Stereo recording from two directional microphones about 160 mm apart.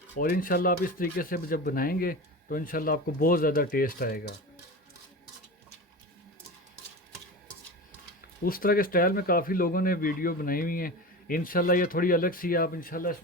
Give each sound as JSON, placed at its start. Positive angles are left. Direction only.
{"t": 0.2, "sound": "speech", "side_deg": 60}
{"t": 8.4, "sound": "speech", "side_deg": 65}